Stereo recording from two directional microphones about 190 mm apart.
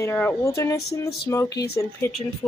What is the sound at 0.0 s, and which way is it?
Speech, 10° left (ahead or behind).